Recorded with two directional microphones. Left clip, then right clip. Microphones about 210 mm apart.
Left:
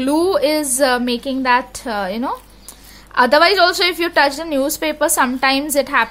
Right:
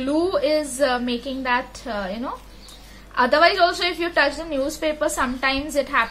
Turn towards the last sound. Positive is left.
turn(degrees=55)  # may be behind; listen again after turning